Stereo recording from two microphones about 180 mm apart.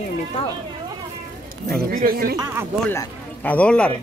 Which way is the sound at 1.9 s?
55° right (ahead or behind).